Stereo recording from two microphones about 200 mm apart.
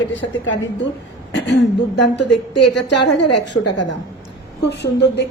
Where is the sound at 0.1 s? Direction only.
65° left (ahead or behind).